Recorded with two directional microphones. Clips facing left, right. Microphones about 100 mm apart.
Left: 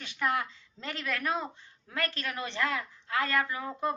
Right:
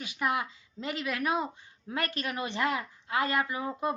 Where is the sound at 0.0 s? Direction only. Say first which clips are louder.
Even; 10° right (ahead or behind).